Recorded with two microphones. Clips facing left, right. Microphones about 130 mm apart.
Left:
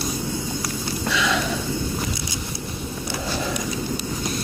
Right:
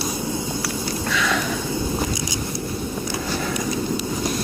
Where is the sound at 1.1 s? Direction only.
20° left (ahead or behind).